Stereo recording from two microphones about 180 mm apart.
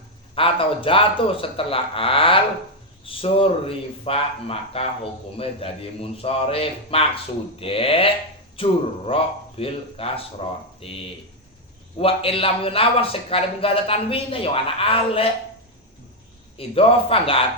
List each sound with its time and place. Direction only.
0.3 s a man's voice: 30° left (ahead or behind)
16.6 s a man's voice: 30° left (ahead or behind)